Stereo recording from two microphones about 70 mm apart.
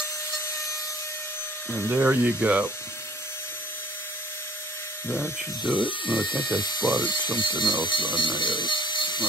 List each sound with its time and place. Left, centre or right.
1.8 s speech: right
5.1 s speech: centre
6.2 s speech: left